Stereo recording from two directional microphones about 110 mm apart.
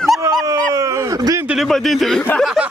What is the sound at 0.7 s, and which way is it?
Dog, 35° right (ahead or behind).